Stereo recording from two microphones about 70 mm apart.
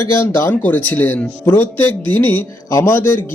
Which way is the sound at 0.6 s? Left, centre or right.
Left.